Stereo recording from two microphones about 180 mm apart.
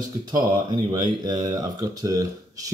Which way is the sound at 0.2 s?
25° right (ahead or behind).